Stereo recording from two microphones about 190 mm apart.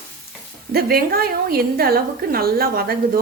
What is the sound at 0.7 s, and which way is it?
Speech, 55° right (ahead or behind).